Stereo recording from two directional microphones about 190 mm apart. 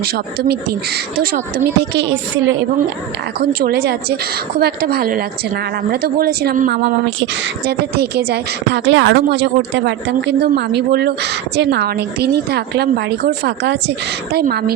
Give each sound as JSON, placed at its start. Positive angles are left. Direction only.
{"t": 0.0, "sound": "speech", "side_deg": -55}
{"t": 3.6, "sound": "a woman's voice", "side_deg": -55}